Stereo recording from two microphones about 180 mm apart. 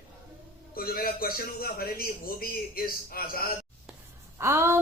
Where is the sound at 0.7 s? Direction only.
55° left (ahead or behind).